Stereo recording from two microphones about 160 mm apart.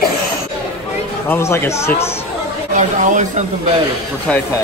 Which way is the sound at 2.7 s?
50° right (ahead or behind).